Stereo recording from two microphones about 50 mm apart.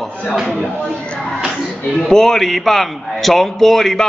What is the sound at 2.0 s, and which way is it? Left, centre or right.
A man's voice, centre.